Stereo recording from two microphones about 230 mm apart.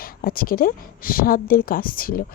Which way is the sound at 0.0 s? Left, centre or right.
Left.